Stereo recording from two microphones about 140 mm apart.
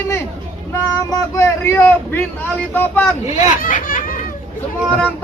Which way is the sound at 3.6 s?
70° left (ahead or behind).